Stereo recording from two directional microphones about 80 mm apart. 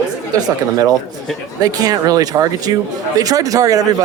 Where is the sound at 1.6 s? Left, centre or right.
Right.